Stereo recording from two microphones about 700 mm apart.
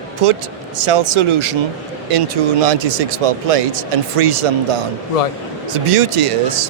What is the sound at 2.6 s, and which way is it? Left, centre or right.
Speech, right.